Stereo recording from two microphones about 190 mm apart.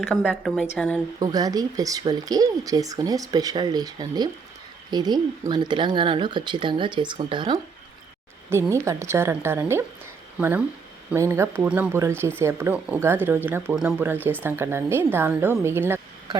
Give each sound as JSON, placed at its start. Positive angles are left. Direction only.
{"t": 0.0, "sound": "speech", "side_deg": 5}
{"t": 1.2, "sound": "speech", "side_deg": -20}
{"t": 8.4, "sound": "speech", "side_deg": -10}
{"t": 11.1, "sound": "speech", "side_deg": -15}